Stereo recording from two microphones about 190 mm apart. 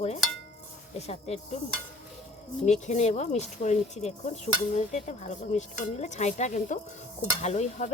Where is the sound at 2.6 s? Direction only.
40° left (ahead or behind).